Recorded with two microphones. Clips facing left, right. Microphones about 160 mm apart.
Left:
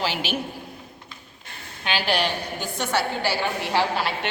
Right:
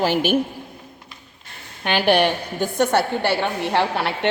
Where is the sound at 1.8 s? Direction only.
55° right (ahead or behind).